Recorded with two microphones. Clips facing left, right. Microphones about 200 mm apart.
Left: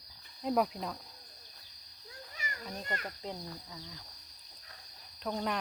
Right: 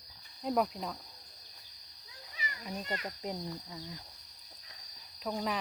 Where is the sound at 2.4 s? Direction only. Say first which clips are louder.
Right 1 dB; 45° left (ahead or behind).